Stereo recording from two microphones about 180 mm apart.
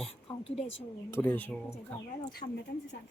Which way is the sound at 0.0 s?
35° left (ahead or behind).